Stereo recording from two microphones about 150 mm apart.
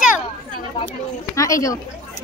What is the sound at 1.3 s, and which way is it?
Speech, 20° left (ahead or behind).